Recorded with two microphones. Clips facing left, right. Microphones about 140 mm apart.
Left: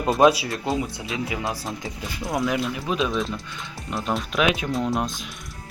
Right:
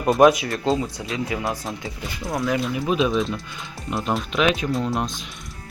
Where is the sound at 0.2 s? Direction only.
25° left (ahead or behind).